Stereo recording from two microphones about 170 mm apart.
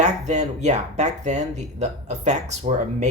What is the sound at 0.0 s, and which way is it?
Speech, 45° right (ahead or behind).